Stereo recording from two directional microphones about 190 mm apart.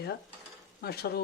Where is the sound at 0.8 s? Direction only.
55° left (ahead or behind).